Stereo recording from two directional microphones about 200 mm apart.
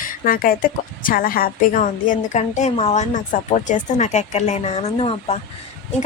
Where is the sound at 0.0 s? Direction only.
45° left (ahead or behind).